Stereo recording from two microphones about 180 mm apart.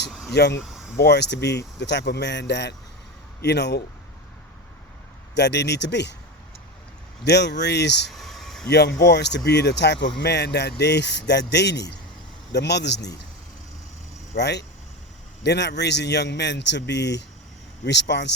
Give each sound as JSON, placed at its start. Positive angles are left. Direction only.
{"t": 0.1, "sound": "vehicle", "side_deg": 0}
{"t": 0.3, "sound": "speech", "side_deg": 70}
{"t": 5.3, "sound": "speech", "side_deg": 70}
{"t": 7.3, "sound": "speech", "side_deg": 70}
{"t": 8.1, "sound": "a sound", "side_deg": 0}
{"t": 8.7, "sound": "speech", "side_deg": 70}
{"t": 14.3, "sound": "speech", "side_deg": 70}